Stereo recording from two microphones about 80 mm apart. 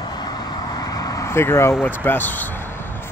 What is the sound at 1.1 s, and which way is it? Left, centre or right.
Speech, left.